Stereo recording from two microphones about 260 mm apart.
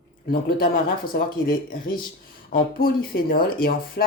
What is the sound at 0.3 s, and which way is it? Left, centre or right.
Speech, left.